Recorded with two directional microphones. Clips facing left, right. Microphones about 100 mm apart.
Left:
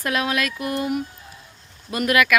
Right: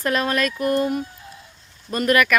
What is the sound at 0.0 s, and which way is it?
Speech, 5° left (ahead or behind).